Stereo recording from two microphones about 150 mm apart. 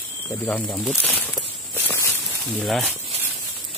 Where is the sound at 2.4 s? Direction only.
Centre (ahead or behind).